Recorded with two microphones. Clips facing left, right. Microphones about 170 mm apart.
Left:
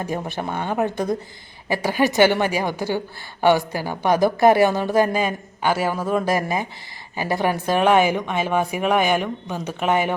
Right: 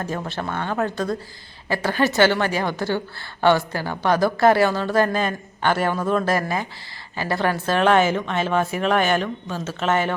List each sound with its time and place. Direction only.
0.0 s a woman's voice: 15° left (ahead or behind)